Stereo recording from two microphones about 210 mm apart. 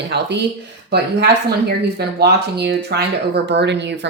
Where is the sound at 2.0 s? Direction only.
50° right (ahead or behind).